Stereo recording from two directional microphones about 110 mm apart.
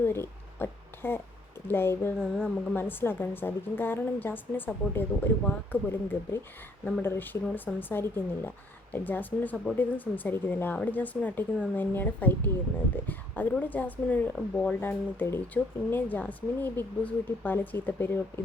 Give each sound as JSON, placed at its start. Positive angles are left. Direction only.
{"t": 0.0, "sound": "a woman's voice", "side_deg": 20}